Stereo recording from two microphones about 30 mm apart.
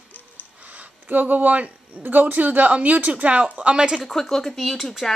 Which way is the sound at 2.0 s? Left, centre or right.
Right.